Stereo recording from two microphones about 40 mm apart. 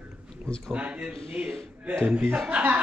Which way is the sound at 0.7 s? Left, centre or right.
Right.